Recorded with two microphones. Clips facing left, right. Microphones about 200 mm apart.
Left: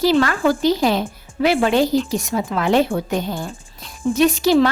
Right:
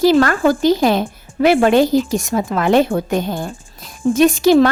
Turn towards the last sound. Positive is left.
turn(degrees=-50)  # may be behind; listen again after turning